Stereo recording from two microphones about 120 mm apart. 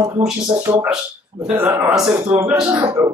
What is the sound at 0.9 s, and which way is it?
Speech, 5° right (ahead or behind).